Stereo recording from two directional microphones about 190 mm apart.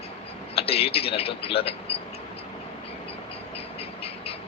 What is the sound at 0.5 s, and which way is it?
Speech, 30° left (ahead or behind).